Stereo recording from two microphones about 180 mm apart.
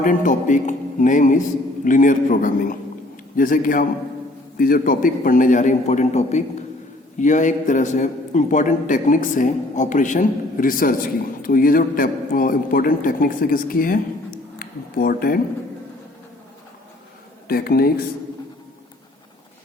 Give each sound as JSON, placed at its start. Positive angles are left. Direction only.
{"t": 0.0, "sound": "a man's voice", "side_deg": 45}
{"t": 17.5, "sound": "speech", "side_deg": 60}